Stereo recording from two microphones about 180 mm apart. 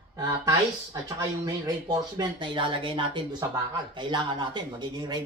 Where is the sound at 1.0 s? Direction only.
20° right (ahead or behind).